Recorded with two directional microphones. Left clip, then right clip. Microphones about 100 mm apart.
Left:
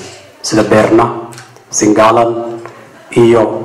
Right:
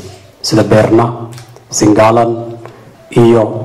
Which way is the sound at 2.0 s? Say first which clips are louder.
Left 2 dB; 25° right (ahead or behind).